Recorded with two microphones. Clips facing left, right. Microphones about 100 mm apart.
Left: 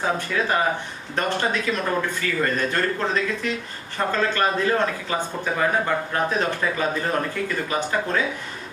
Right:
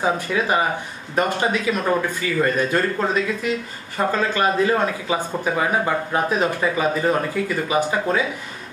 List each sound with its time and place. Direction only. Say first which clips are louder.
0.0 s speech: right 3 dB; 10° right (ahead or behind)
4.1 s speech: right 1 dB; 10° right (ahead or behind)